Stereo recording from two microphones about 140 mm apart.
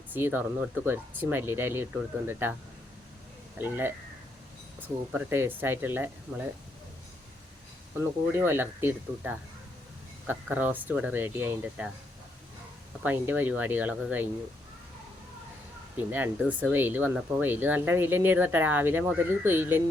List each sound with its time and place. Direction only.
0.1 s speech: 15° right (ahead or behind)
3.6 s speech: 15° right (ahead or behind)
8.3 s speech: 15° right (ahead or behind)
13.0 s speech: 10° right (ahead or behind)
16.0 s speech: 15° right (ahead or behind)